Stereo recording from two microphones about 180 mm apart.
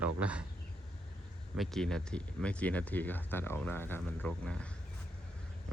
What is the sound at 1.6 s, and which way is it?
Speech, centre (ahead or behind).